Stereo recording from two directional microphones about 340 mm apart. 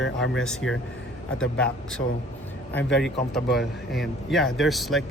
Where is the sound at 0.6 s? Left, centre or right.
Left.